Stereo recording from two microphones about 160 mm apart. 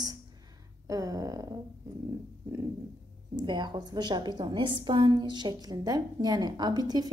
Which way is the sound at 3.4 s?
30° right (ahead or behind).